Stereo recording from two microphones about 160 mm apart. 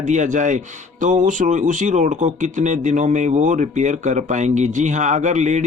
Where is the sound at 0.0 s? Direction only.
50° right (ahead or behind).